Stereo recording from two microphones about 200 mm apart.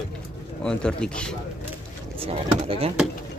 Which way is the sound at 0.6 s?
5° left (ahead or behind).